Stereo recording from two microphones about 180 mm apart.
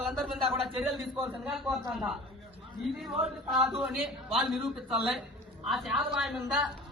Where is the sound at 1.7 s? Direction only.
Centre (ahead or behind).